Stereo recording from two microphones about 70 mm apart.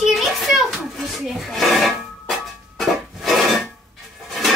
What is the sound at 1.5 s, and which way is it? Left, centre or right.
Rub, centre.